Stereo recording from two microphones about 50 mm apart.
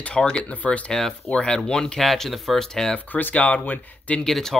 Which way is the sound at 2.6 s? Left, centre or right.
Centre.